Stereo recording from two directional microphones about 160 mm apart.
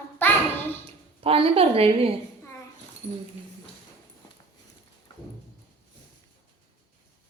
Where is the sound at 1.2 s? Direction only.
35° right (ahead or behind).